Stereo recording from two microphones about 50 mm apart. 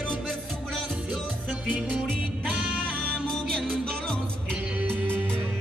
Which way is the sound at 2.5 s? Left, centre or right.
Right.